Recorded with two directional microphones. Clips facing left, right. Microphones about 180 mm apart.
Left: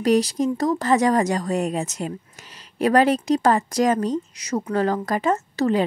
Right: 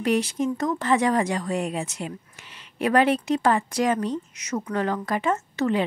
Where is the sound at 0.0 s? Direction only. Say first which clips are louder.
Left 4 dB; 40° left (ahead or behind).